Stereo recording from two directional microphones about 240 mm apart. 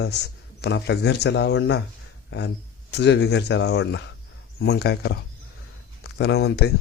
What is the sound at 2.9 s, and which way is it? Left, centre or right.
Speech, left.